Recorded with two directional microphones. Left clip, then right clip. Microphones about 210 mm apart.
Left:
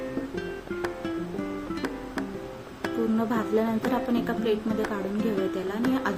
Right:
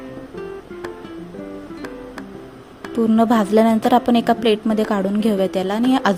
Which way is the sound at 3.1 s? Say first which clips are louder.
Right 14 dB; 45° right (ahead or behind).